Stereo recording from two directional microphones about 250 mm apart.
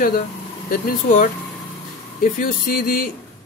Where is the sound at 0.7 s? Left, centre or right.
Left.